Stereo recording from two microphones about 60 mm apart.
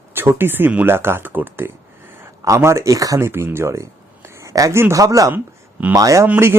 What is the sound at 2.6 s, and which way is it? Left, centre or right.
Speech, right.